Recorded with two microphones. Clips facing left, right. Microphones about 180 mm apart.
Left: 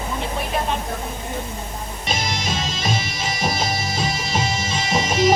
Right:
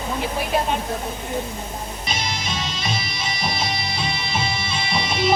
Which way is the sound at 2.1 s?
45° left (ahead or behind).